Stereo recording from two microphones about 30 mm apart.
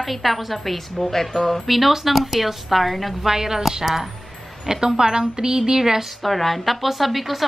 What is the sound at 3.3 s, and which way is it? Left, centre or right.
Speech, centre.